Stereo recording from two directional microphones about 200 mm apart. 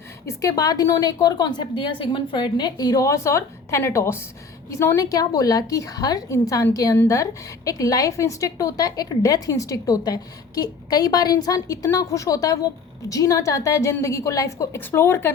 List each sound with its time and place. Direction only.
0.3 s a woman's voice: 15° left (ahead or behind)